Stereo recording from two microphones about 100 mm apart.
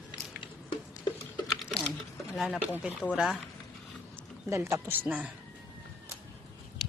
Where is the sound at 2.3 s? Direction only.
5° right (ahead or behind).